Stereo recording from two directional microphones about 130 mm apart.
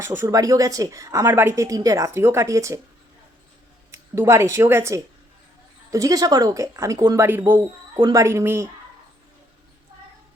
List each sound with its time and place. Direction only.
0.0 s a woman's voice: 20° right (ahead or behind)
3.9 s a woman's voice: 20° right (ahead or behind)
7.3 s a woman's voice: 15° right (ahead or behind)